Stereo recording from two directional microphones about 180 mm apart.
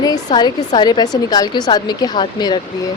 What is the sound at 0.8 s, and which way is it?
Speech, 20° left (ahead or behind).